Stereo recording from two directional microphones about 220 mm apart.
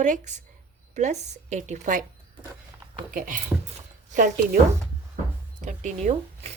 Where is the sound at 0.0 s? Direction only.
35° right (ahead or behind).